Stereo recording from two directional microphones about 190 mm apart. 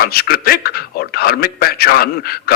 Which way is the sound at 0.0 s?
55° left (ahead or behind).